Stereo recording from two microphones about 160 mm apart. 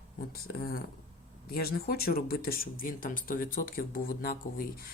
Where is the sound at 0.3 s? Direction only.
70° left (ahead or behind).